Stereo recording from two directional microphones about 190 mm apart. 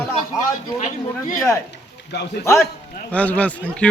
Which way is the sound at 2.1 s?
65° left (ahead or behind).